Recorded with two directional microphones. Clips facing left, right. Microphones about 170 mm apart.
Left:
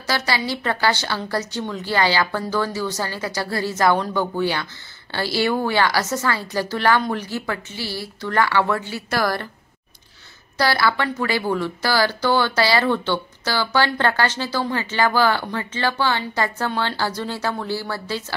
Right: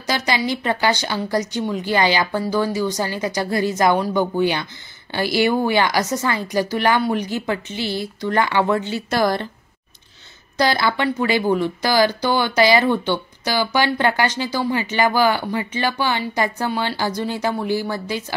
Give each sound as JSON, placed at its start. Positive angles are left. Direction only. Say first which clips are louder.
{"t": 0.0, "sound": "speech", "louder": "right 2 dB", "side_deg": -15}
{"t": 10.6, "sound": "speech", "louder": "right 1 dB", "side_deg": -20}